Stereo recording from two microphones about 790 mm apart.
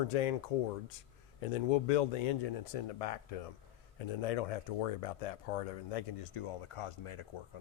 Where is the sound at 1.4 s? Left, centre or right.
Left.